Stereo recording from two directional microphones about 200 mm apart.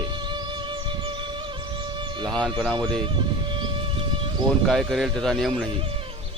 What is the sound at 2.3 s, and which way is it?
Speech, 5° left (ahead or behind).